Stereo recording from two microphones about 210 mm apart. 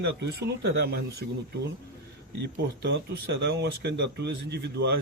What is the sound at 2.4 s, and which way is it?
Speech, 55° right (ahead or behind).